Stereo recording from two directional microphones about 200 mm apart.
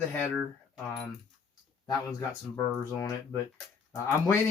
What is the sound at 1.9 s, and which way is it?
Speech, 15° left (ahead or behind).